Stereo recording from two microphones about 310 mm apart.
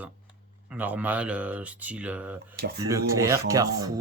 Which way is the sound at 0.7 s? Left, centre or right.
Centre.